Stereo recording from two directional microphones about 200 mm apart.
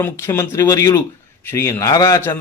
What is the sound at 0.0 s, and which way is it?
A man's voice, 10° left (ahead or behind).